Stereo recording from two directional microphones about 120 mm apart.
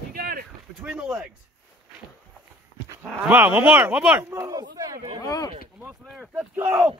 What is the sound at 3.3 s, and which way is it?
Speech, 15° right (ahead or behind).